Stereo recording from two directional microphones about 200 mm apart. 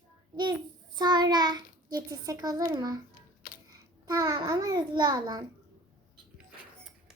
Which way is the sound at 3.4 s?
45° left (ahead or behind).